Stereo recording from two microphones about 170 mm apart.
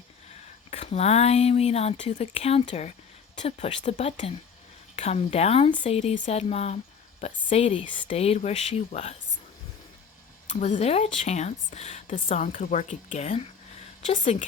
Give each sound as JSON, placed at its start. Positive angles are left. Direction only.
{"t": 0.7, "sound": "speech", "side_deg": 40}
{"t": 10.5, "sound": "speech", "side_deg": 40}